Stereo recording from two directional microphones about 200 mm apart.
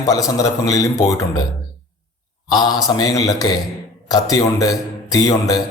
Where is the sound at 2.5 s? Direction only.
20° left (ahead or behind).